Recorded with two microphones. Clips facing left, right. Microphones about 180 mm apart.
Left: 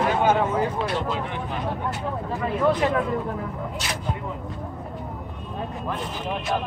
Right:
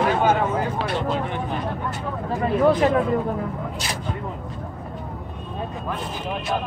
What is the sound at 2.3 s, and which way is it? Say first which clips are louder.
Speech: right 4 dB; 45° right (ahead or behind).